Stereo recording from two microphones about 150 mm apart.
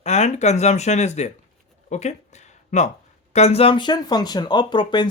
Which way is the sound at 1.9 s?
50° left (ahead or behind).